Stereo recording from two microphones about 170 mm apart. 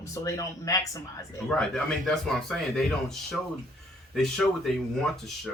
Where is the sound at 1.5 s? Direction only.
5° left (ahead or behind).